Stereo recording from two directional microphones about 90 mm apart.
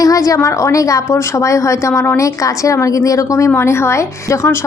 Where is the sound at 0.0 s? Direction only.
40° left (ahead or behind).